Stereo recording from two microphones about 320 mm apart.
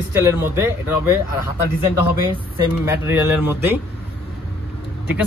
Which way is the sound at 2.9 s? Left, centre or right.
Centre.